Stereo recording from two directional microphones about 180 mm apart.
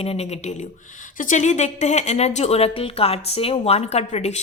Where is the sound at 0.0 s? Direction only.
35° left (ahead or behind).